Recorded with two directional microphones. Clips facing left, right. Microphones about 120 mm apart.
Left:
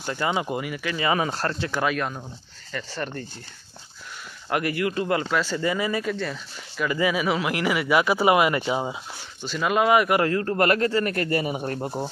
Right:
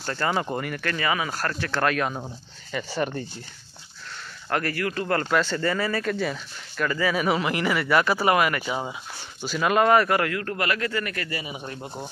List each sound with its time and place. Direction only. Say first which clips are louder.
0.0 s speech: even; 15° left (ahead or behind)
1.0 s speech: left 4 dB; 30° left (ahead or behind)
1.7 s speech: right 4 dB; 5° left (ahead or behind)
2.1 s speech: right 3 dB; 15° right (ahead or behind)
4.5 s speech: left 2 dB; 15° left (ahead or behind)
5.2 s speech: right 1 dB; 5° left (ahead or behind)
6.1 s speech: right 2 dB; 5° right (ahead or behind)
6.9 s speech: left 2 dB; 15° left (ahead or behind)
7.2 s speech: even; centre (ahead or behind); by 8.9 s 20° left (ahead or behind)
9.4 s speech: right 1 dB; 5° right (ahead or behind)
10.0 s speech: left 3 dB; 20° left (ahead or behind)
10.6 s speech: left 7 dB; 40° left (ahead or behind)